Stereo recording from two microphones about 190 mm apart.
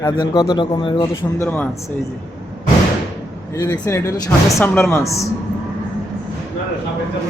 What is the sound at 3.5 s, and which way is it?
Speech, 15° left (ahead or behind).